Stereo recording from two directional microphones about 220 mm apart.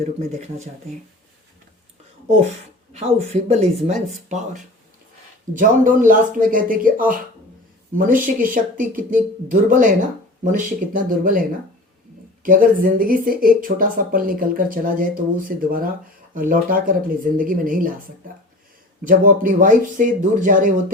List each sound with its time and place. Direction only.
0.0 s speech: 30° right (ahead or behind)
2.4 s speech: 30° right (ahead or behind)
5.5 s speech: 35° right (ahead or behind)
19.0 s speech: 40° right (ahead or behind)